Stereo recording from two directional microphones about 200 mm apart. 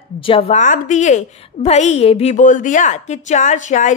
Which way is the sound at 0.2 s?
30° left (ahead or behind).